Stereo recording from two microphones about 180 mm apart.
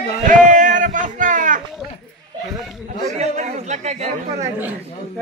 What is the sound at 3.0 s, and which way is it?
Speech, 40° right (ahead or behind).